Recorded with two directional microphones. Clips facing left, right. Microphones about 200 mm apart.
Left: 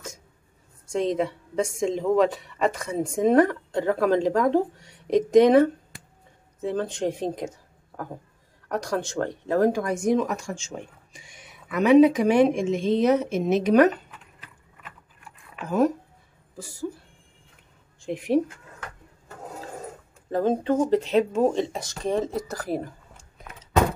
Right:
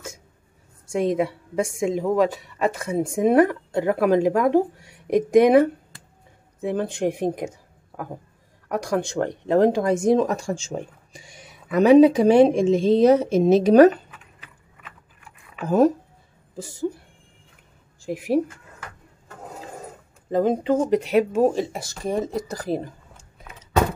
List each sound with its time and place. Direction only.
0.8 s a woman's voice: 10° right (ahead or behind); by 13.8 s 35° right (ahead or behind)
16.5 s speech: 20° right (ahead or behind)
18.0 s speech: 5° right (ahead or behind)
20.2 s a woman's voice: 15° right (ahead or behind)